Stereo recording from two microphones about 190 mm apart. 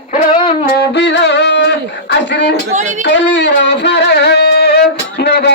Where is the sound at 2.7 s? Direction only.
40° right (ahead or behind).